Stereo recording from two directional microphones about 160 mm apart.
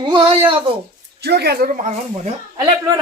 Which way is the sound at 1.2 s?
90° right.